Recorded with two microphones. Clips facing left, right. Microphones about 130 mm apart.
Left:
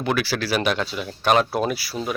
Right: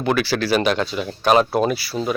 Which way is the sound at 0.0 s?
5° left (ahead or behind).